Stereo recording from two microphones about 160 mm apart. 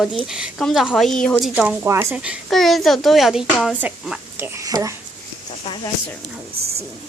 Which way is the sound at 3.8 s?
15° right (ahead or behind).